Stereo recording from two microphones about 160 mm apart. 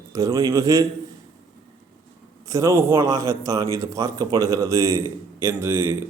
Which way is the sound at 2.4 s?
20° right (ahead or behind).